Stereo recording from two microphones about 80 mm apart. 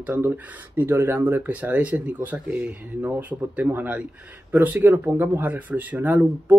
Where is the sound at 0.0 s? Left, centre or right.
Right.